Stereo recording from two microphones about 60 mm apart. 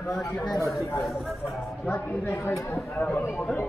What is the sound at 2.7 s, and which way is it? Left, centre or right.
Speech, left.